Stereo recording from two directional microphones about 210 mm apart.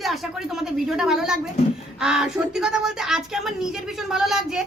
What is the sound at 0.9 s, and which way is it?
A woman's voice, 5° right (ahead or behind).